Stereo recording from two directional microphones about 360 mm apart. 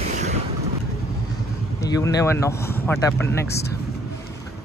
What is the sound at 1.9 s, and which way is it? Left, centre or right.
Speech, centre.